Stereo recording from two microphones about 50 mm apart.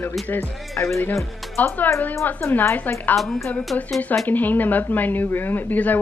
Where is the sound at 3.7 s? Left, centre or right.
Left.